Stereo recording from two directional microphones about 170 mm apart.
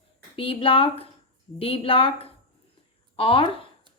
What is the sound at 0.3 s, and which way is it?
Speech, 30° left (ahead or behind).